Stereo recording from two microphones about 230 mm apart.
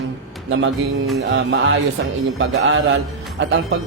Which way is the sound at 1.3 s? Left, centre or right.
Right.